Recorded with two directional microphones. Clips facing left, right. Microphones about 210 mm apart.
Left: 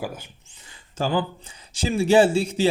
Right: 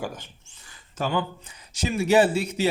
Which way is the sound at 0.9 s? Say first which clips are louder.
Left 3 dB; 30° left (ahead or behind).